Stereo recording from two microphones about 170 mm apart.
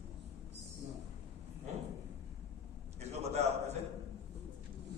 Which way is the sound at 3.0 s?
40° right (ahead or behind).